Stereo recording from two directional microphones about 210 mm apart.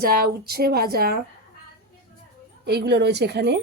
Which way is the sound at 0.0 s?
45° right (ahead or behind).